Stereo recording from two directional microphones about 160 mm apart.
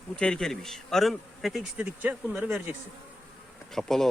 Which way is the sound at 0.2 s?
5° left (ahead or behind).